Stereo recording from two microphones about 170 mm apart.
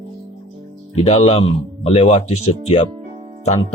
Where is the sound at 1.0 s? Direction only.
35° left (ahead or behind).